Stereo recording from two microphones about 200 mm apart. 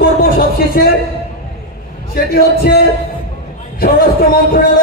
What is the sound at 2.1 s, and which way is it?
Speech, 55° left (ahead or behind).